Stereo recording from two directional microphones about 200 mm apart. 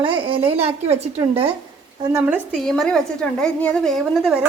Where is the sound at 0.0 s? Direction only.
25° right (ahead or behind).